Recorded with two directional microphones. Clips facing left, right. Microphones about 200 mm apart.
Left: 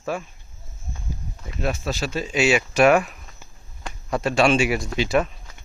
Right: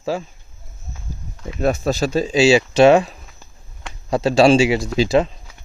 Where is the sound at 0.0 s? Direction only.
30° right (ahead or behind).